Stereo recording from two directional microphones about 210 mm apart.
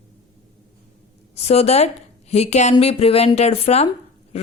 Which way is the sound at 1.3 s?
30° left (ahead or behind).